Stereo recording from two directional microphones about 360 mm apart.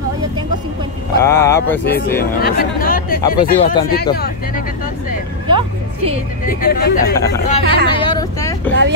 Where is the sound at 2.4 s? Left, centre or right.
Left.